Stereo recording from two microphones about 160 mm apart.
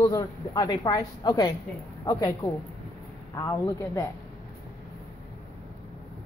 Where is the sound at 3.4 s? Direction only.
20° left (ahead or behind).